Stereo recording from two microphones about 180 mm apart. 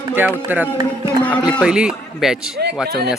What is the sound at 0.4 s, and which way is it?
A man's voice, 10° right (ahead or behind).